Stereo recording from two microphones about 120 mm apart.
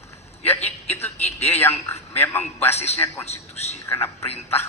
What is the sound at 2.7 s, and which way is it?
Speech, 60° left (ahead or behind).